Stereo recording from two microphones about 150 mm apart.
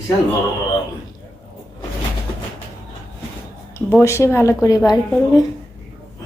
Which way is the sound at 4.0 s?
20° left (ahead or behind).